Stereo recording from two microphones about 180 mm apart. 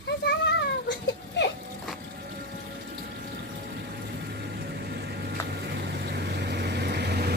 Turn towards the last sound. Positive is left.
turn(degrees=-65)  # may be behind; listen again after turning